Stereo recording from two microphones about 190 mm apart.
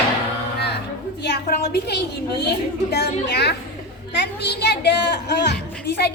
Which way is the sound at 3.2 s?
60° left (ahead or behind).